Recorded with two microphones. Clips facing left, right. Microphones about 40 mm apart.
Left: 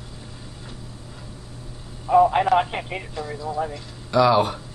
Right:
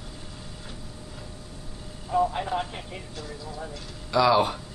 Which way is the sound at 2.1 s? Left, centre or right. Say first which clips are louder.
Left 9 dB; left.